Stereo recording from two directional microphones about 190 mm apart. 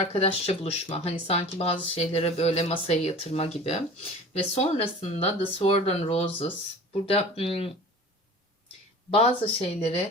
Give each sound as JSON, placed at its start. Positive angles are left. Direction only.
{"t": 0.0, "sound": "speech", "side_deg": 30}
{"t": 9.0, "sound": "speech", "side_deg": 30}